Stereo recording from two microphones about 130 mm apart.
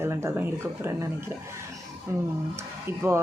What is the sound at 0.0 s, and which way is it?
Speech, 20° right (ahead or behind).